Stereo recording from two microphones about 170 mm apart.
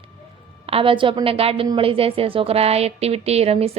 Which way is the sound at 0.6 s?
35° right (ahead or behind).